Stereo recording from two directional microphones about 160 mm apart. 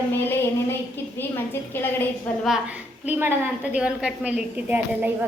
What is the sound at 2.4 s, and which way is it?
A woman's voice, 5° right (ahead or behind).